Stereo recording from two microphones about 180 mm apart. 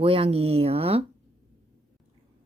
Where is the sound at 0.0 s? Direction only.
30° right (ahead or behind).